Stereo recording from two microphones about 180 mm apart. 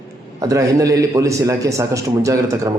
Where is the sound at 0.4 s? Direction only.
20° right (ahead or behind).